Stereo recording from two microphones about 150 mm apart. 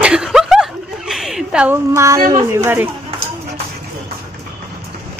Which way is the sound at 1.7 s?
20° right (ahead or behind).